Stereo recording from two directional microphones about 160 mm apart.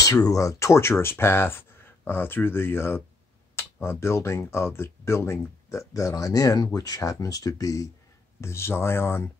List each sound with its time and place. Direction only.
0.0 s speech: 20° left (ahead or behind)